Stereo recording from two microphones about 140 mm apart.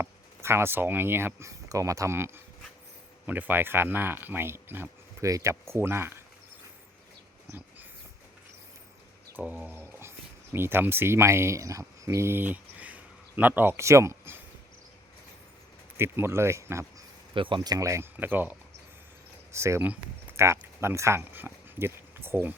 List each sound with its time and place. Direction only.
0.0 s speech: 20° right (ahead or behind)
9.3 s speech: 10° right (ahead or behind)
16.0 s speech: 15° right (ahead or behind)
17.3 s speech: 35° right (ahead or behind); by 18.5 s 15° right (ahead or behind)
19.5 s speech: 20° right (ahead or behind)